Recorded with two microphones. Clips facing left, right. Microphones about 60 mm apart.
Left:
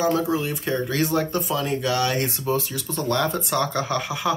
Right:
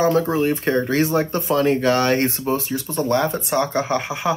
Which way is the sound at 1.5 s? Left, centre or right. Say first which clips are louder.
Right 10 dB; right.